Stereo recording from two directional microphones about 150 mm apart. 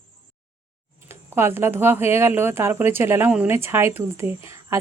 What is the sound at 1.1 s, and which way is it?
Speech, 15° right (ahead or behind).